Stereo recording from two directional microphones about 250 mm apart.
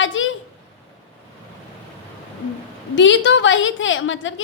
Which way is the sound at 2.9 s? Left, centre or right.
Left.